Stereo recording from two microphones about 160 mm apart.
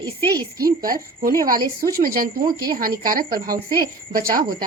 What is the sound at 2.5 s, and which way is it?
Speech, 25° right (ahead or behind).